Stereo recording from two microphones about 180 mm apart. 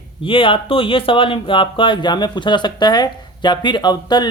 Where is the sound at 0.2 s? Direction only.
30° left (ahead or behind).